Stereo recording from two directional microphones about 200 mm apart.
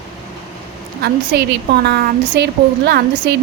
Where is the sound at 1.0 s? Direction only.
55° right (ahead or behind).